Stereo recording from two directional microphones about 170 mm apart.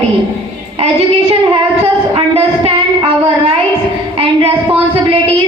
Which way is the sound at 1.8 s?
35° right (ahead or behind).